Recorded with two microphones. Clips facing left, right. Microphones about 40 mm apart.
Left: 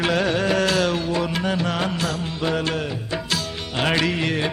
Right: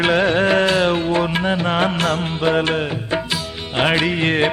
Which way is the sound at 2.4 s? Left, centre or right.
Right.